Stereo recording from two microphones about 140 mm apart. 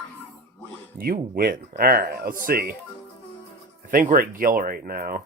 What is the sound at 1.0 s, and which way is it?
Speech, 90° right.